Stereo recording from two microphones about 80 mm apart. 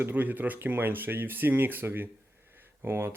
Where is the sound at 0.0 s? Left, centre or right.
Right.